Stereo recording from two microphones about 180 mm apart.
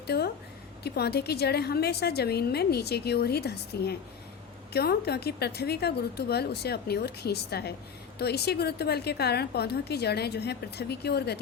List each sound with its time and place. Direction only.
0.1 s a woman's voice: 65° left (ahead or behind)